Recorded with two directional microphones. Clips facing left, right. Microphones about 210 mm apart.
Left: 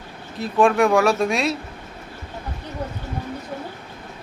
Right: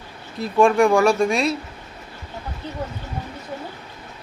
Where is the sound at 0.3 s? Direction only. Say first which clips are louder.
Right 1 dB; centre (ahead or behind).